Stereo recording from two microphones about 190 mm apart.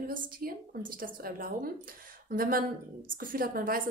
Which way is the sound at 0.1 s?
50° right (ahead or behind).